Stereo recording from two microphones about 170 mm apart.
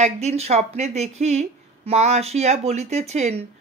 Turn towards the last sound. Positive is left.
turn(degrees=-40)  # may be behind; listen again after turning